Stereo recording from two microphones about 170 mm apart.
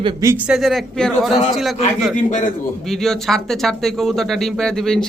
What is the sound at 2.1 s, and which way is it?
Speech, 50° left (ahead or behind).